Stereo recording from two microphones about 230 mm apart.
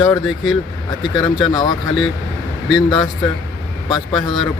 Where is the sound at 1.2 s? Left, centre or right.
Centre.